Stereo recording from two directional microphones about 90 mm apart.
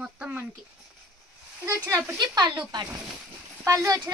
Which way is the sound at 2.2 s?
50° right (ahead or behind).